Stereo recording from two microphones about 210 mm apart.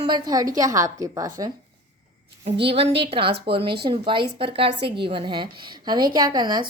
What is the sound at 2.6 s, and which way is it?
A woman's voice, 25° right (ahead or behind).